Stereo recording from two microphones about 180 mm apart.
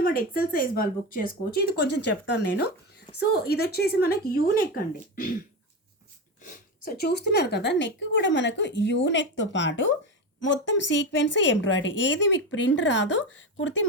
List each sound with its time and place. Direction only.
0.0 s speech: 55° left (ahead or behind); by 2.6 s 75° left (ahead or behind)
3.2 s speech: 60° left (ahead or behind)
6.4 s a woman's voice: 50° left (ahead or behind); by 13.7 s 90° left